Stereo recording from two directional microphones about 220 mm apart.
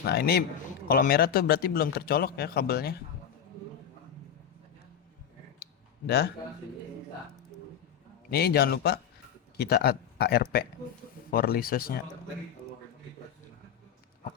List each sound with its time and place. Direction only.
0.1 s speech: 45° left (ahead or behind)
6.1 s speech: 45° left (ahead or behind)
8.3 s speech: 45° left (ahead or behind)